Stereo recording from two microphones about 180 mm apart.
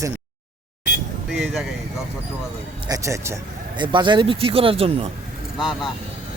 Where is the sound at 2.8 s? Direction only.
20° right (ahead or behind).